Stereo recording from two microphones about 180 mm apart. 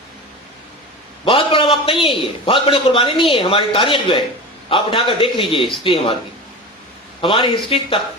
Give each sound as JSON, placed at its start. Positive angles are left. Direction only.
{"t": 1.2, "sound": "a man's voice", "side_deg": 30}
{"t": 7.2, "sound": "a man's voice", "side_deg": 30}